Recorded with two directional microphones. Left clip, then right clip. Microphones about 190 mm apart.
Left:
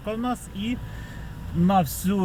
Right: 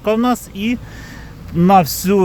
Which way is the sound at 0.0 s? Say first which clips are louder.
Right 13 dB; 50° right (ahead or behind).